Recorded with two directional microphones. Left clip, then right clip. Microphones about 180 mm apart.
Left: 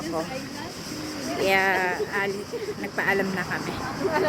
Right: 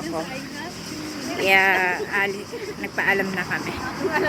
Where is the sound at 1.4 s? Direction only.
5° left (ahead or behind).